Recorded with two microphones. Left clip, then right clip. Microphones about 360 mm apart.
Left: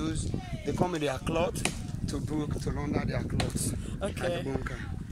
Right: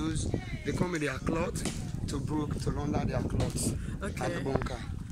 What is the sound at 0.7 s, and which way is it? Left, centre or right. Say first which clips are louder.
Speech: left 3 dB; centre.